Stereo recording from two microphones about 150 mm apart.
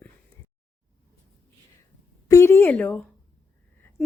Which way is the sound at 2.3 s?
20° left (ahead or behind).